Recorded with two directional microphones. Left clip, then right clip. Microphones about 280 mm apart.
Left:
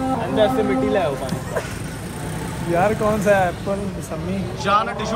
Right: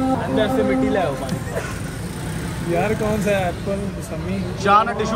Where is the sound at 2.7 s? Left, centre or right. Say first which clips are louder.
Left 3 dB; centre.